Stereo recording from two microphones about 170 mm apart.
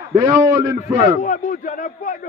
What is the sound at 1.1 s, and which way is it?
Speech, 55° left (ahead or behind).